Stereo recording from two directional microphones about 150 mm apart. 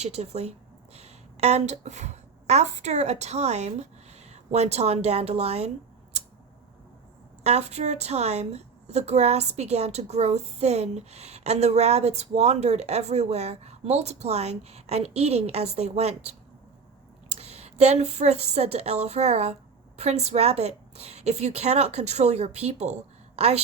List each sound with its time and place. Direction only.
0.0 s a woman's voice: 45° right (ahead or behind)
7.4 s a woman's voice: 45° right (ahead or behind)